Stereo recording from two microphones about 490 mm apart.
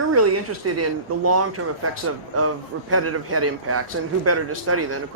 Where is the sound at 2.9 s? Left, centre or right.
Right.